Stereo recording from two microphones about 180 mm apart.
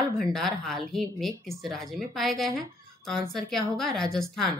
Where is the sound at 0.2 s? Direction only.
Centre (ahead or behind).